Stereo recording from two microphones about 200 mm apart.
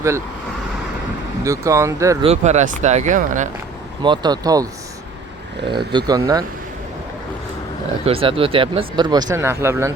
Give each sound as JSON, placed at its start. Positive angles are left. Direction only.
{"t": 1.5, "sound": "speech", "side_deg": -15}
{"t": 2.2, "sound": "speech", "side_deg": -35}
{"t": 4.0, "sound": "speech", "side_deg": -20}
{"t": 8.0, "sound": "speech", "side_deg": -25}